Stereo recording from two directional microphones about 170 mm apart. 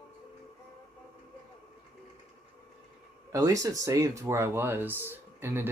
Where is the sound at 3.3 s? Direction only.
20° right (ahead or behind).